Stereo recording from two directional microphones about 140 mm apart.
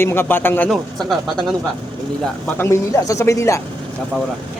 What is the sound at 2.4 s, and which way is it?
Speech, 15° left (ahead or behind).